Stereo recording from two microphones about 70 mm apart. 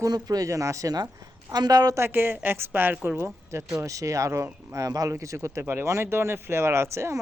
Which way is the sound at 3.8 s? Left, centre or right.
Right.